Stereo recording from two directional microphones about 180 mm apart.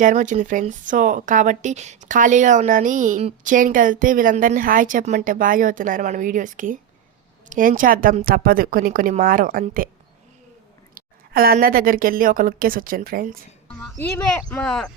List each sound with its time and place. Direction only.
0.0 s speech: 45° right (ahead or behind)
10.9 s speech: 55° right (ahead or behind)
13.8 s speech: 5° left (ahead or behind)